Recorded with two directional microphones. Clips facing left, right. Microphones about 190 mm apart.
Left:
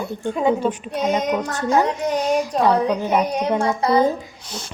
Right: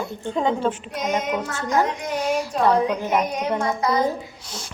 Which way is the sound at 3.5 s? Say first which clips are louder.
Left 3 dB; 30° left (ahead or behind).